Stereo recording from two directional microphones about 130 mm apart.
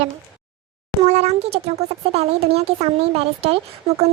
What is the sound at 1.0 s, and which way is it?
Speech, 55° right (ahead or behind).